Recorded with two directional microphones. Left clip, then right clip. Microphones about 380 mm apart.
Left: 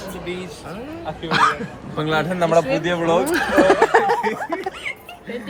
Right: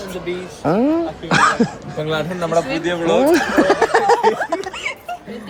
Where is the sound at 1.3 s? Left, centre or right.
Centre.